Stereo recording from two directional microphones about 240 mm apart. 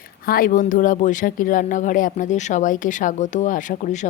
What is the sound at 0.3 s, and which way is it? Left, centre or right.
Speech, left.